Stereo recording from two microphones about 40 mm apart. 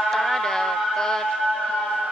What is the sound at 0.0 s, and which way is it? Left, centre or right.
Music, centre.